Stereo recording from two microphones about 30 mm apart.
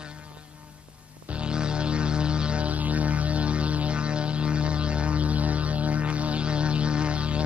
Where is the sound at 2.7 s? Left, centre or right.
Right.